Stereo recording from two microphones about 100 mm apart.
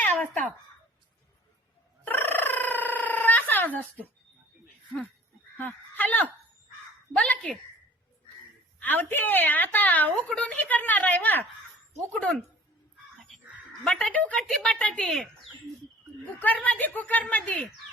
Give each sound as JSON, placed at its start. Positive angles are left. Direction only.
{"t": 0.2, "sound": "speech", "side_deg": 10}
{"t": 2.0, "sound": "telephone bell ringing", "side_deg": 20}
{"t": 5.5, "sound": "speech", "side_deg": 20}
{"t": 8.8, "sound": "a woman's voice", "side_deg": 20}
{"t": 13.3, "sound": "a sound", "side_deg": 0}
{"t": 13.8, "sound": "speech", "side_deg": 10}
{"t": 16.4, "sound": "speech", "side_deg": 15}